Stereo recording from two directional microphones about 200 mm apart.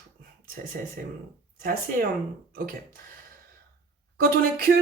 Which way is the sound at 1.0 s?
45° right (ahead or behind).